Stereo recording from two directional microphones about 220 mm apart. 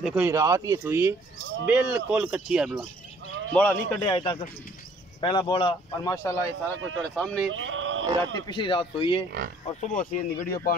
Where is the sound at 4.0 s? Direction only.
20° left (ahead or behind).